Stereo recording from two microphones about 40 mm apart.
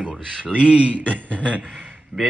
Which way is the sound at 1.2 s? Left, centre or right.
Left.